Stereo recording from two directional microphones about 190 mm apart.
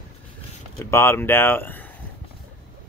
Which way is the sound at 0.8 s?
15° left (ahead or behind).